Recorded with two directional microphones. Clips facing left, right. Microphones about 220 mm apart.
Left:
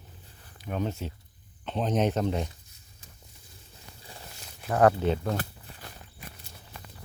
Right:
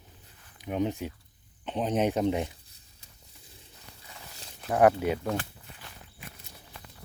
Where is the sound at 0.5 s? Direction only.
15° right (ahead or behind).